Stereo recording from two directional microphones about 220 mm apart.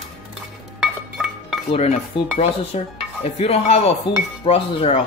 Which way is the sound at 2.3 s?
30° left (ahead or behind).